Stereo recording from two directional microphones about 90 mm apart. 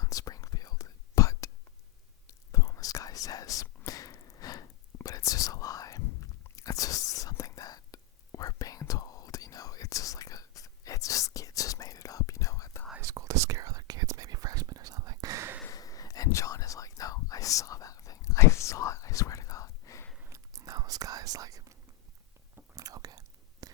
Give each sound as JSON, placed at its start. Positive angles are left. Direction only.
{"t": 0.0, "sound": "whispering", "side_deg": 45}
{"t": 13.0, "sound": "whispering", "side_deg": -35}
{"t": 15.7, "sound": "whispering", "side_deg": 40}
{"t": 20.3, "sound": "whispering", "side_deg": -40}